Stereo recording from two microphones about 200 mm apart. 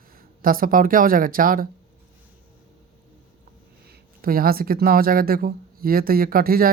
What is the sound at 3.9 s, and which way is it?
Speech, 45° right (ahead or behind).